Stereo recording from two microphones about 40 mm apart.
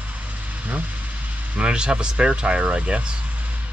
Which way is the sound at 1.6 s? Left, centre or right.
Right.